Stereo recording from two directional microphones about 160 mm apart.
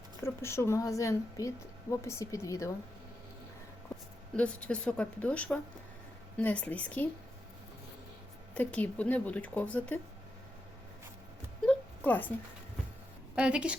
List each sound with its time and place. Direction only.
0.2 s a woman's voice: 15° left (ahead or behind)
4.4 s a woman's voice: 5° left (ahead or behind)
8.5 s a woman's voice: 10° left (ahead or behind)
11.6 s a sound: 10° left (ahead or behind)
13.3 s a woman's voice: 5° right (ahead or behind)